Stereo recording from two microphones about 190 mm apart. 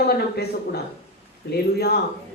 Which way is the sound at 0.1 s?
55° left (ahead or behind).